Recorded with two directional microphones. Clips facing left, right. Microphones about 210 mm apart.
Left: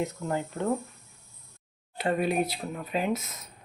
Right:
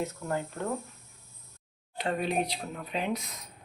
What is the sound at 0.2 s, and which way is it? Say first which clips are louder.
Speech: left 2 dB; 20° left (ahead or behind).